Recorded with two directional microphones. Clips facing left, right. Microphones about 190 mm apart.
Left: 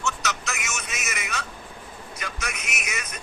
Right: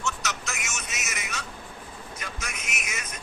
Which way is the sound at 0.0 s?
70° left (ahead or behind).